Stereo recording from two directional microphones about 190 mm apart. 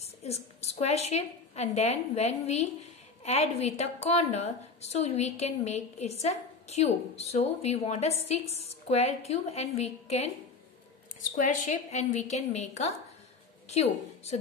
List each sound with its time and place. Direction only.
0.0 s a woman's voice: 35° left (ahead or behind)
11.3 s a woman's voice: 40° left (ahead or behind)